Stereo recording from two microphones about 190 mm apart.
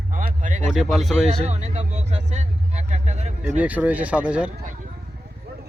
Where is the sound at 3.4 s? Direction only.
5° right (ahead or behind).